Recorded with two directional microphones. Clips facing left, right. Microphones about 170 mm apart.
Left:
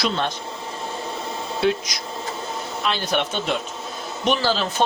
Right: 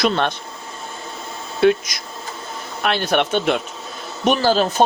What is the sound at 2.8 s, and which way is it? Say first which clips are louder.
Speech: right 5 dB; 65° right (ahead or behind).